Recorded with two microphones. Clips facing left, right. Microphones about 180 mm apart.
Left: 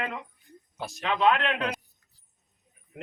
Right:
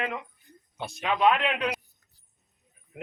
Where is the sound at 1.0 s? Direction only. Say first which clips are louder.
Right 1 dB; 10° right (ahead or behind).